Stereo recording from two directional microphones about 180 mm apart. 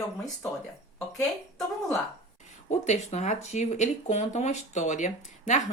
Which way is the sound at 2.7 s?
40° left (ahead or behind).